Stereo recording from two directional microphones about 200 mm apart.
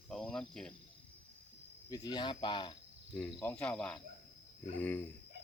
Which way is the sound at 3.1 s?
5° left (ahead or behind).